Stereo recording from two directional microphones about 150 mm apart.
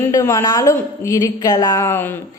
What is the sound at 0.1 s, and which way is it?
A woman's voice, 20° left (ahead or behind).